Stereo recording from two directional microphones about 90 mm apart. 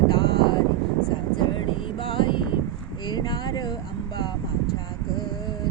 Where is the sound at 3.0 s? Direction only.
55° left (ahead or behind).